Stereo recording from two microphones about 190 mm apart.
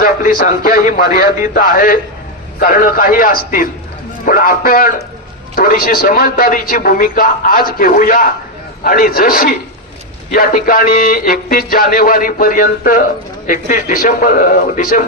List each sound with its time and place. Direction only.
0.0 s a man's voice: 50° left (ahead or behind)